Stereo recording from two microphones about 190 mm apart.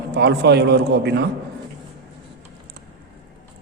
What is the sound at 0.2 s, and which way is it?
A man's voice, 60° right (ahead or behind).